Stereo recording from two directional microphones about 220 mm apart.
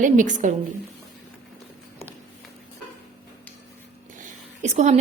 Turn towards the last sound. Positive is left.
turn(degrees=-30)  # may be behind; listen again after turning